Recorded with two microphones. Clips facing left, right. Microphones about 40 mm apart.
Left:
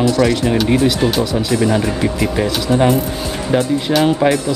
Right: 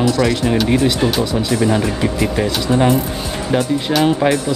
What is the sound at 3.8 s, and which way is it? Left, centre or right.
Speech, centre.